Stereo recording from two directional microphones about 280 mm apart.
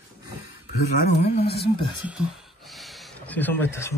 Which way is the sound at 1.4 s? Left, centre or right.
Left.